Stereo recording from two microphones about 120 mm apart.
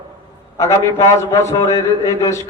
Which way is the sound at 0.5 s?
25° left (ahead or behind).